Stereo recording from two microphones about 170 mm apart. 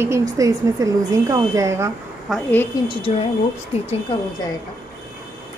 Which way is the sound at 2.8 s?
30° left (ahead or behind).